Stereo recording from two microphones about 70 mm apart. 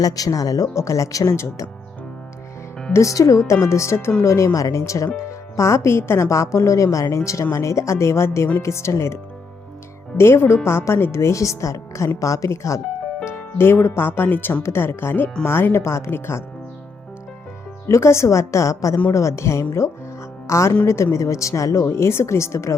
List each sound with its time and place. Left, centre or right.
0.0 s speech: left
2.9 s speech: left
10.2 s speech: left
13.2 s speech: left
17.8 s speech: left